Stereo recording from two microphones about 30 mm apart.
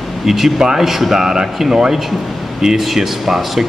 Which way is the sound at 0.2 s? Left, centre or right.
Centre.